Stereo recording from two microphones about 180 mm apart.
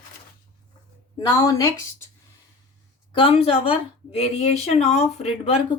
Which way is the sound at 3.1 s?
30° left (ahead or behind).